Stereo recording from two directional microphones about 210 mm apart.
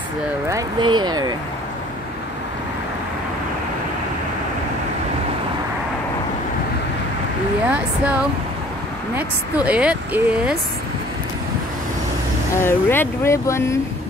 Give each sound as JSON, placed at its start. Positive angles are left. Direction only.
{"t": 0.5, "sound": "speech", "side_deg": -20}
{"t": 7.6, "sound": "speech", "side_deg": -5}
{"t": 12.6, "sound": "speech", "side_deg": 10}